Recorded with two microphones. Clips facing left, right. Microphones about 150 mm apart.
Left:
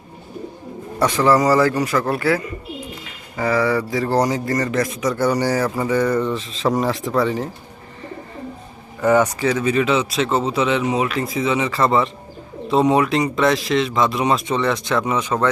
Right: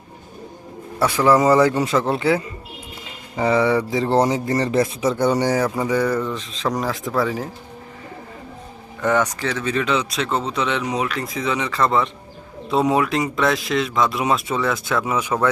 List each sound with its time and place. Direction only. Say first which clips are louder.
1.0 s a man's voice: even; 10° right (ahead or behind); by 5.1 s 30° right (ahead or behind)
5.1 s speech: even; 15° right (ahead or behind)
9.0 s speech: left 4 dB; 10° left (ahead or behind); by 15.4 s 10° right (ahead or behind)